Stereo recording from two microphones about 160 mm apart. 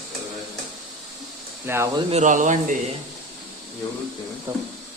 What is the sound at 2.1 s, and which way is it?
Speech, 50° right (ahead or behind).